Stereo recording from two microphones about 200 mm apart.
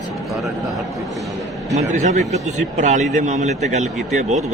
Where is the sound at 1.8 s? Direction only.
35° right (ahead or behind).